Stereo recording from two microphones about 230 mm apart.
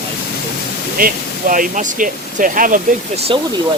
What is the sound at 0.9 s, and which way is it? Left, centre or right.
Speech, right.